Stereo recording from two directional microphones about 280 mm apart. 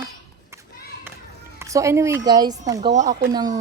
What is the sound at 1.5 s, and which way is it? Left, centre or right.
A woman's voice, centre.